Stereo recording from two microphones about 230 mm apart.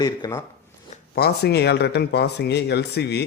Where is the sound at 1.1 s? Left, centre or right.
Left.